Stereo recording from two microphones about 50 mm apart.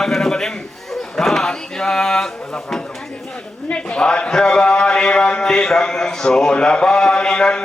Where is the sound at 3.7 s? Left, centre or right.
Centre.